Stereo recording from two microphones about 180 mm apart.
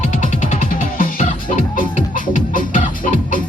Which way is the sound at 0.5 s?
45° left (ahead or behind).